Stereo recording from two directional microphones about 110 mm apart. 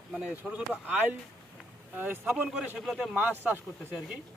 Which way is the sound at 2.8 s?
Centre (ahead or behind).